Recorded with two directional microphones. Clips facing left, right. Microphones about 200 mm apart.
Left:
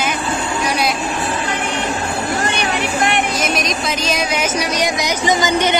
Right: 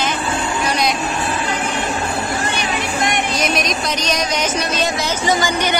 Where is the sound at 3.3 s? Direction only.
Centre (ahead or behind).